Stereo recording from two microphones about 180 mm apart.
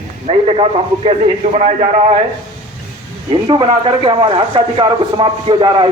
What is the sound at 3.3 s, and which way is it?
Speech, 30° right (ahead or behind).